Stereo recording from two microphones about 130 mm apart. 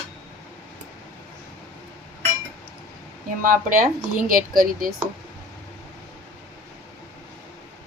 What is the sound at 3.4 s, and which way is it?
Speech, 90° right.